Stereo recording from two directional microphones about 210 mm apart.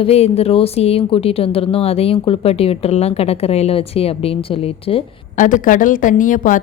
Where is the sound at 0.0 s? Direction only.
30° left (ahead or behind).